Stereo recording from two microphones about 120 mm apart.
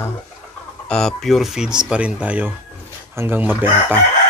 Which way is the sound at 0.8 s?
5° left (ahead or behind).